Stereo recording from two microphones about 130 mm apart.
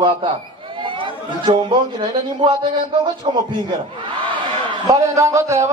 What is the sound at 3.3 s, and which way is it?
A man's voice, 40° right (ahead or behind).